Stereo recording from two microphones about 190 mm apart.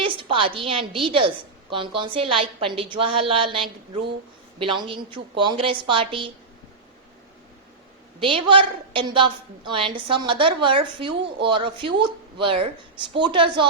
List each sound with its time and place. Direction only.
0.0 s a woman's voice: 25° right (ahead or behind)
8.2 s a woman's voice: 25° right (ahead or behind)